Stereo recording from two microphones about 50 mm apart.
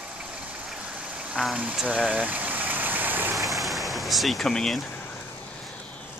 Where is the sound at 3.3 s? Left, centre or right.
Centre.